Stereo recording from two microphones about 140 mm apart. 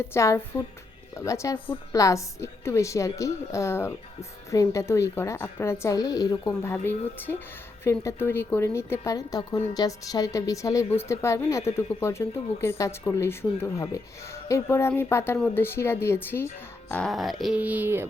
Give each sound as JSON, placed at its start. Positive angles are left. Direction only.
{"t": 0.0, "sound": "a woman's voice", "side_deg": 20}
{"t": 16.9, "sound": "speech", "side_deg": 5}